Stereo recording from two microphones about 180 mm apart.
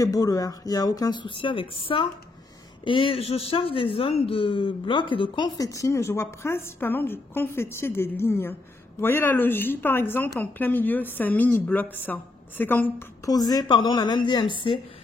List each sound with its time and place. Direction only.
0.0 s speech: 20° left (ahead or behind)